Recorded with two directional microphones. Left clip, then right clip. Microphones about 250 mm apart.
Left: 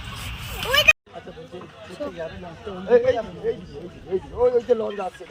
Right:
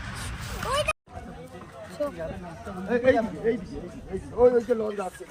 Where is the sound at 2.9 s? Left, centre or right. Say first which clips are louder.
Left 4 dB; left.